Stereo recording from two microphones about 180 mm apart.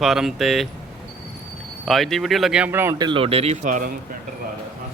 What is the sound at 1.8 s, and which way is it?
Speech, centre (ahead or behind).